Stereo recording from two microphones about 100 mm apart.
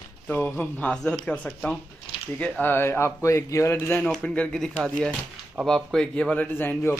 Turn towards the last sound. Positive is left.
turn(degrees=20)  # may be behind; listen again after turning